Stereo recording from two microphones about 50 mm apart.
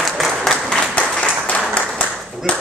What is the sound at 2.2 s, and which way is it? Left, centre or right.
Clapping, centre.